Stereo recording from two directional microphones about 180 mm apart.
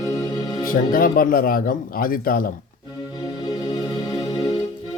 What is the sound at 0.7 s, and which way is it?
Speech, 50° left (ahead or behind).